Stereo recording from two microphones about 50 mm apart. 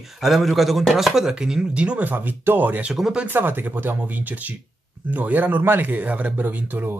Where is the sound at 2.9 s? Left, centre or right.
Centre.